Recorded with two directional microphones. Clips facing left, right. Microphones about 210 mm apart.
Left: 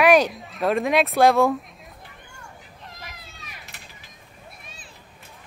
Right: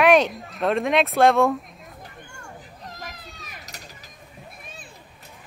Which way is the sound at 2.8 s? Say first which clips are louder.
Right 4 dB; 40° right (ahead or behind).